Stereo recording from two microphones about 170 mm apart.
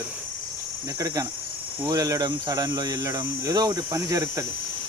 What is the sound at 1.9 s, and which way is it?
Speech, 20° right (ahead or behind).